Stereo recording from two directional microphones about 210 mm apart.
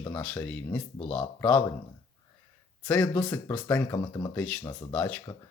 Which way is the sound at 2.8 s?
5° left (ahead or behind).